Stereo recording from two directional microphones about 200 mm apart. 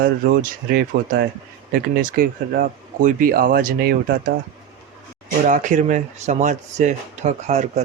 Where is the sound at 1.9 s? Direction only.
45° right (ahead or behind).